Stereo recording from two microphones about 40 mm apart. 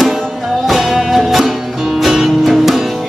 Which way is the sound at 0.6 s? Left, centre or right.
Centre.